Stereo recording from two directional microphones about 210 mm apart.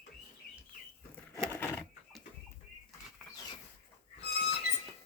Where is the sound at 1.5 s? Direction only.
10° left (ahead or behind).